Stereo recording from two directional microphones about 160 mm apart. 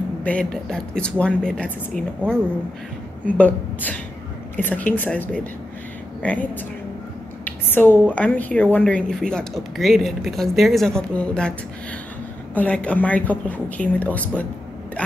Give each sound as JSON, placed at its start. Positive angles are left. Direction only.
{"t": 0.2, "sound": "speech", "side_deg": 5}
{"t": 12.5, "sound": "speech", "side_deg": 10}